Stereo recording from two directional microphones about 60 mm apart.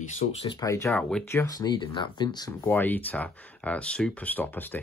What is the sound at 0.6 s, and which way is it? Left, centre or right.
Speech, left.